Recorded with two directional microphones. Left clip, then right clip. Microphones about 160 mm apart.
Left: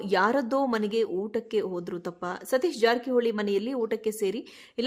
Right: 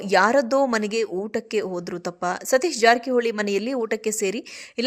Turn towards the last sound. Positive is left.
turn(degrees=-15)  # may be behind; listen again after turning